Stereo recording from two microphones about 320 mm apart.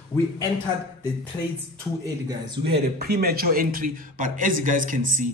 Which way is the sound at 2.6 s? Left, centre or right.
Centre.